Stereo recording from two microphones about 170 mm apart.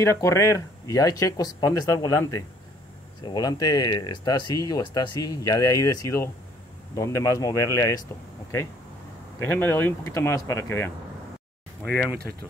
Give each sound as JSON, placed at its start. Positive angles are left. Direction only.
{"t": 0.0, "sound": "speech", "side_deg": 15}
{"t": 9.4, "sound": "speech", "side_deg": 15}
{"t": 11.8, "sound": "speech", "side_deg": 5}